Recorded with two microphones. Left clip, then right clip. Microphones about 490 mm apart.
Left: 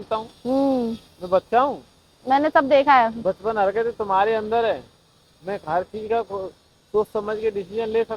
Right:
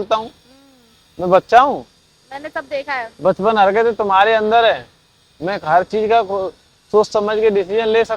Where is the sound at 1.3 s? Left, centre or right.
Right.